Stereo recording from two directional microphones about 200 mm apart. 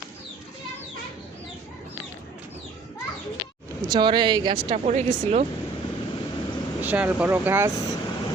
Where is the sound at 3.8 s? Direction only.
20° right (ahead or behind).